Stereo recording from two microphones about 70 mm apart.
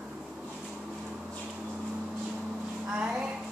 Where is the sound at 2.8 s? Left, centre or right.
Centre.